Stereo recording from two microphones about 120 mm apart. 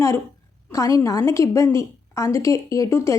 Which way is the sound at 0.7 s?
25° left (ahead or behind).